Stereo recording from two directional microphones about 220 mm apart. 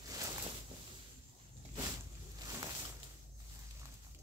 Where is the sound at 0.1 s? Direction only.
15° right (ahead or behind).